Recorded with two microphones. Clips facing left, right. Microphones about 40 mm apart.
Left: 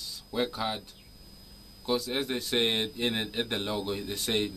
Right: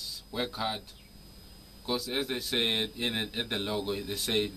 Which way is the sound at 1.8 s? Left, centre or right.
Centre.